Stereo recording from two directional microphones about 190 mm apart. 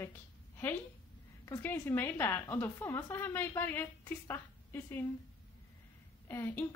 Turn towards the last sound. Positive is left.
turn(degrees=10)  # may be behind; listen again after turning